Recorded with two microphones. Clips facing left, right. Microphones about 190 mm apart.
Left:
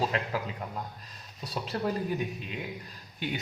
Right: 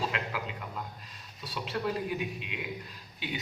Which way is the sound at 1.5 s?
40° left (ahead or behind).